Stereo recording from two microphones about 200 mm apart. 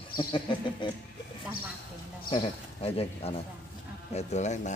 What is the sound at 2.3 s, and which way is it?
Speech, 30° left (ahead or behind).